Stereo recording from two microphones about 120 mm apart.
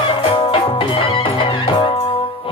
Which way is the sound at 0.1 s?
45° left (ahead or behind).